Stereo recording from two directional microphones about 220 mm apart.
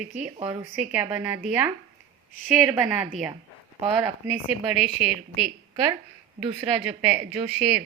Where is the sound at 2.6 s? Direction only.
10° right (ahead or behind).